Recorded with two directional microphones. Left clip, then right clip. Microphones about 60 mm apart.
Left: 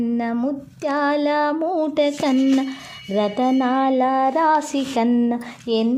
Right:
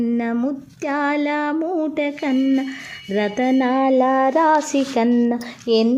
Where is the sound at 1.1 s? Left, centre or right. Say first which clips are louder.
Left 2 dB; left.